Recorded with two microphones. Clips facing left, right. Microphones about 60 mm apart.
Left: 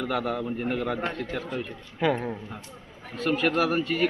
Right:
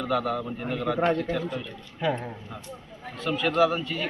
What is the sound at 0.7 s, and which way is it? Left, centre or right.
Speech, left.